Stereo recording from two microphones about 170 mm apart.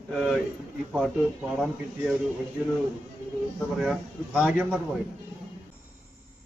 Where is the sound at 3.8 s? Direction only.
5° right (ahead or behind).